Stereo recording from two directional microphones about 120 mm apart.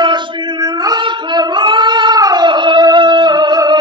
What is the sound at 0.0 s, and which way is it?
Singing, 40° right (ahead or behind).